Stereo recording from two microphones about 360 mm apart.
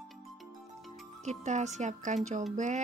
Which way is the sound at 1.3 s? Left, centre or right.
Centre.